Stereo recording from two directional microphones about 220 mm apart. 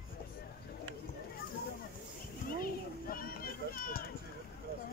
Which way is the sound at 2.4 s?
40° left (ahead or behind).